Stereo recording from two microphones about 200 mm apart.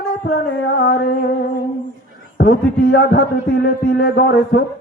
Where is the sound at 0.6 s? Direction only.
60° left (ahead or behind).